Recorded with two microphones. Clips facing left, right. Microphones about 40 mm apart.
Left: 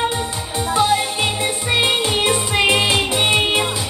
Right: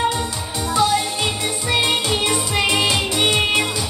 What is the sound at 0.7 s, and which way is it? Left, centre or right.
Music, left.